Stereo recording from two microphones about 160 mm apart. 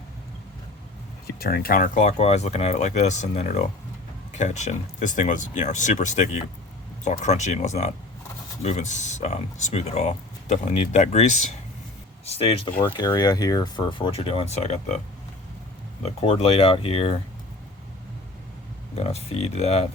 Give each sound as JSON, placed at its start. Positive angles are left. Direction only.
{"t": 1.4, "sound": "speech", "side_deg": 65}
{"t": 16.0, "sound": "speech", "side_deg": 40}
{"t": 18.9, "sound": "speech", "side_deg": 40}